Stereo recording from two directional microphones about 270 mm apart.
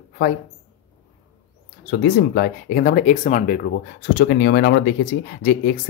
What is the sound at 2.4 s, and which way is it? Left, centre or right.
Speech, left.